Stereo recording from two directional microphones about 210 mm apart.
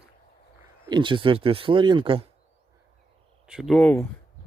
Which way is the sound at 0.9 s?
25° right (ahead or behind).